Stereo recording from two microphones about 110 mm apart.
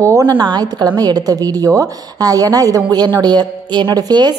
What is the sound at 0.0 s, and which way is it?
A woman's voice, 30° right (ahead or behind).